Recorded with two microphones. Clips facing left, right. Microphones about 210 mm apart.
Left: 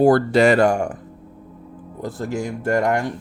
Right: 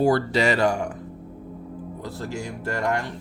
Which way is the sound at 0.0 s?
50° left (ahead or behind).